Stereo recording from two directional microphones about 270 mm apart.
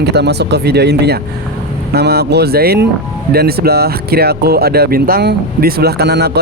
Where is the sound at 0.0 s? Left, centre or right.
Right.